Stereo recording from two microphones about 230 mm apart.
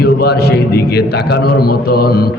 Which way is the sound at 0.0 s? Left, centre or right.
Left.